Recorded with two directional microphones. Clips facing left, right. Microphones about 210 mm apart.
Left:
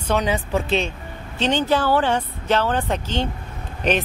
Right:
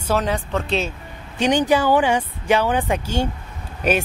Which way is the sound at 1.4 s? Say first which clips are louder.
Right 3 dB; 15° right (ahead or behind).